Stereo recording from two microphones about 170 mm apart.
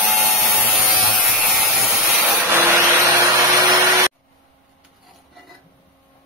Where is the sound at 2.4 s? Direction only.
15° right (ahead or behind).